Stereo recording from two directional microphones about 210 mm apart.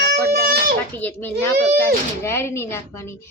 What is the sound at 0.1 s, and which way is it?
Baby cry, 45° right (ahead or behind).